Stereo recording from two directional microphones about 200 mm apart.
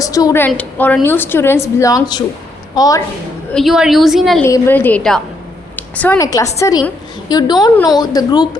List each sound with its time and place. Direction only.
0.0 s a woman's voice: 15° left (ahead or behind)
3.5 s a woman's voice: centre (ahead or behind)
4.4 s a woman's voice: 10° left (ahead or behind)